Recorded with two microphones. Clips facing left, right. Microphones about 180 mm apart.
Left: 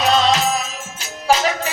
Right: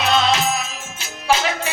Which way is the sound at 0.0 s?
40° left (ahead or behind).